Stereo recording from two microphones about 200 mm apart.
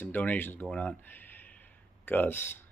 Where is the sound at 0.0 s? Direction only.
10° left (ahead or behind).